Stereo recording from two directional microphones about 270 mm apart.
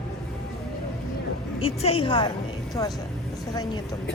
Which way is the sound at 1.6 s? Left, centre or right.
Left.